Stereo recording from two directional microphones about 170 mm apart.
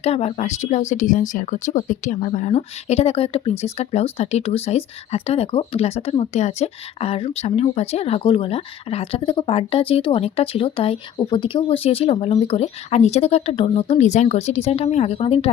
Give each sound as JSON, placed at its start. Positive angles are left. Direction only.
{"t": 0.0, "sound": "speech", "side_deg": 40}